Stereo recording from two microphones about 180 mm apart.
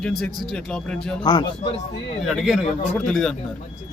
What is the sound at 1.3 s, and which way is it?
Speech, 25° left (ahead or behind).